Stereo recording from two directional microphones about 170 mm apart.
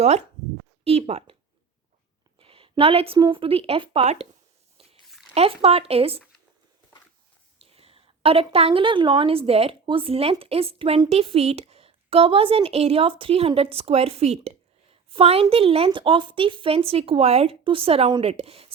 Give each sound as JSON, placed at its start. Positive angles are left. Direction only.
{"t": 0.9, "sound": "a woman's voice", "side_deg": -35}
{"t": 2.4, "sound": "a woman's voice", "side_deg": -30}
{"t": 4.8, "sound": "a sound", "side_deg": -35}
{"t": 5.3, "sound": "a woman's voice", "side_deg": -35}
{"t": 7.6, "sound": "a woman's voice", "side_deg": -35}